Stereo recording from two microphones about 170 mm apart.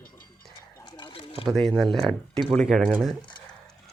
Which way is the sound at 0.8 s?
30° left (ahead or behind).